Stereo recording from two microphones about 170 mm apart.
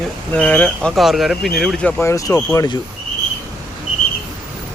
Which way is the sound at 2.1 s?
20° left (ahead or behind).